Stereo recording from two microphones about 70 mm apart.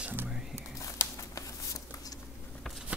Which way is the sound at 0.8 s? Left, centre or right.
Left.